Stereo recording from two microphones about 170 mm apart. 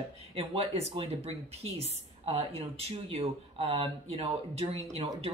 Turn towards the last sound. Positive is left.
turn(degrees=-35)  # may be behind; listen again after turning